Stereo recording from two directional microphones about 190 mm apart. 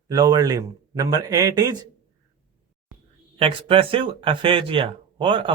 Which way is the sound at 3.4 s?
30° right (ahead or behind).